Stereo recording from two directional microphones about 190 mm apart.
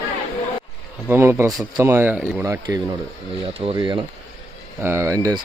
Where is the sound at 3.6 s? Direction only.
25° right (ahead or behind).